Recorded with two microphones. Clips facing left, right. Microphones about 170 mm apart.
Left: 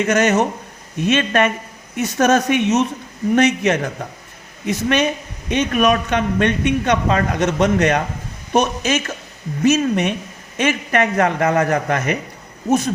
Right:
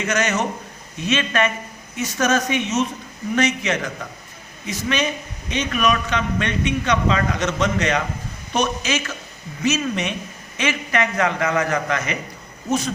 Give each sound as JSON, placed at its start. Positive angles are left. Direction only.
{"t": 0.0, "sound": "a man's voice", "side_deg": 50}